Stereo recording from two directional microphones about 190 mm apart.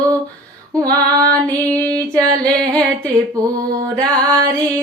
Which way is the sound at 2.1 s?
20° right (ahead or behind).